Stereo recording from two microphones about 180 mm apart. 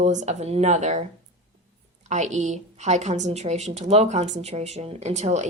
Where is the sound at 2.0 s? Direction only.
40° right (ahead or behind).